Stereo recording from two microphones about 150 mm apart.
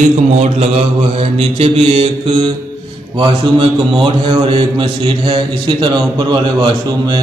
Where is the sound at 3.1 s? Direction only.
35° right (ahead or behind).